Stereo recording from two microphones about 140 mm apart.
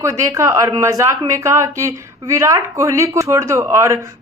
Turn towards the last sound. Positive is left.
turn(degrees=-20)  # may be behind; listen again after turning